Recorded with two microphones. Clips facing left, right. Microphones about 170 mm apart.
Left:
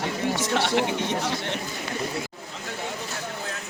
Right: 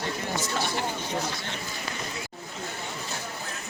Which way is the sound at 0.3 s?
85° left.